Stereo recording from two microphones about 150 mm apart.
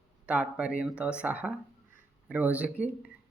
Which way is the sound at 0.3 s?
10° right (ahead or behind).